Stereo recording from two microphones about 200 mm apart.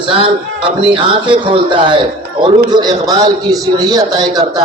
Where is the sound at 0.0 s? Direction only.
25° right (ahead or behind).